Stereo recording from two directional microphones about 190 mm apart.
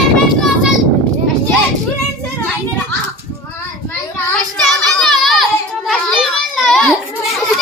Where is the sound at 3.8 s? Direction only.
5° left (ahead or behind).